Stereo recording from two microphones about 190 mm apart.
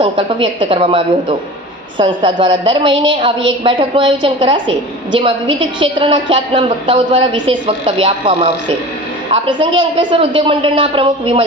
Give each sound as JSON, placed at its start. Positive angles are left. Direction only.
{"t": 0.0, "sound": "a woman's voice", "side_deg": -30}